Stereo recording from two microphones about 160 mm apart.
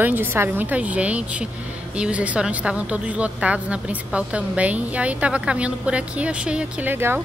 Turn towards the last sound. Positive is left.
turn(degrees=-15)  # may be behind; listen again after turning